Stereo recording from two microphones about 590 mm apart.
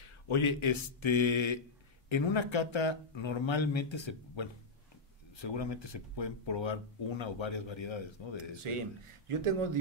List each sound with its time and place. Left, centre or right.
0.0 s speech: left
8.6 s speech: right